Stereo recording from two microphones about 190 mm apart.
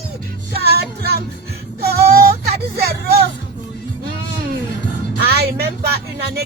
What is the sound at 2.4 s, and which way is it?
Vehicle, 55° right (ahead or behind).